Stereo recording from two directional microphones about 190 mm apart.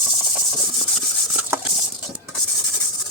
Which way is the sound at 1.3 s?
10° right (ahead or behind).